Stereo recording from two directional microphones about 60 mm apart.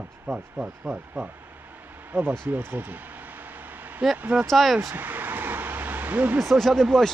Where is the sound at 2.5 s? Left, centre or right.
Right.